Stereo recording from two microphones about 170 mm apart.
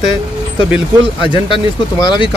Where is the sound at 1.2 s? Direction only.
30° left (ahead or behind).